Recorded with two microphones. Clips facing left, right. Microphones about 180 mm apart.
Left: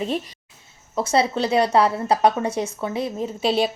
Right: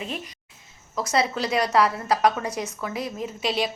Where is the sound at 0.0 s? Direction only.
35° left (ahead or behind).